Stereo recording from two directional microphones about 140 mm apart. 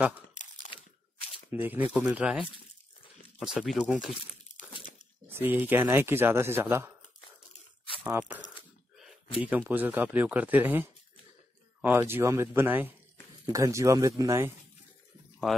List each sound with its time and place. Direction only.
1.5 s a man's voice: 15° right (ahead or behind)
4.6 s a sound: 65° left (ahead or behind)
5.4 s a man's voice: 15° right (ahead or behind)
8.0 s speech: 10° right (ahead or behind)
9.4 s a man's voice: 10° right (ahead or behind)
15.5 s speech: centre (ahead or behind)